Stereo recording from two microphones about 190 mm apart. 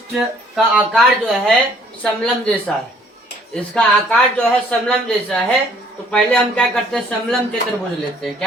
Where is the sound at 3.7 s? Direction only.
5° left (ahead or behind).